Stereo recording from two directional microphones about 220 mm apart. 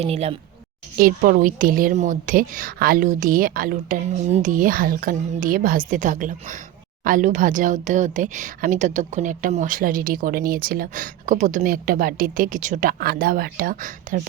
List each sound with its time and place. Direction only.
0.0 s a woman's voice: 30° right (ahead or behind)
0.9 s speech: 40° right (ahead or behind)